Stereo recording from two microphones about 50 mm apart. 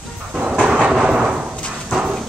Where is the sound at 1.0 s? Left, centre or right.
Centre.